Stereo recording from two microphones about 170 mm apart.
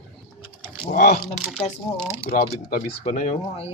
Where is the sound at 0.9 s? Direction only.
65° left (ahead or behind).